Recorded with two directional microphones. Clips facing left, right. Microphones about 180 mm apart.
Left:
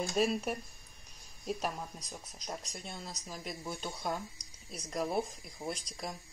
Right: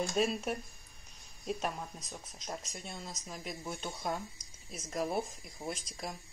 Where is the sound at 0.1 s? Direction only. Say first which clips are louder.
Left 1 dB; centre (ahead or behind).